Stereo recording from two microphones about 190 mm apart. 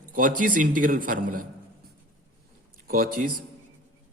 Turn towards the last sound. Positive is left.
turn(degrees=-45)  # may be behind; listen again after turning